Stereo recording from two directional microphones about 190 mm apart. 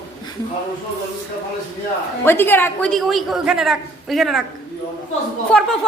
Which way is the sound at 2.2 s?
10° left (ahead or behind).